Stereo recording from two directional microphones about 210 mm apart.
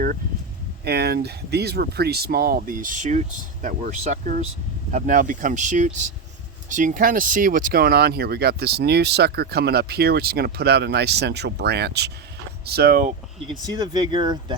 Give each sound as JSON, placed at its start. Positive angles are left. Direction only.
{"t": 0.9, "sound": "speech", "side_deg": -50}
{"t": 13.5, "sound": "speech", "side_deg": -20}